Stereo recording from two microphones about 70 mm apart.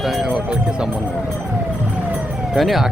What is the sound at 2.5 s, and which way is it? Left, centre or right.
Speech, centre.